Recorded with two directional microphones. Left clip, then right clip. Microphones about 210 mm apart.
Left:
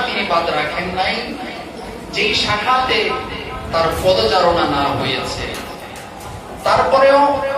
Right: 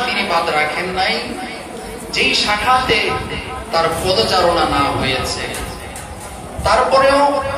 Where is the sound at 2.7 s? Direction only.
50° right (ahead or behind).